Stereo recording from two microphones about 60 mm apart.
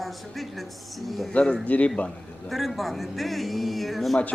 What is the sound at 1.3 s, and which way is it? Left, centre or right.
Speech, centre.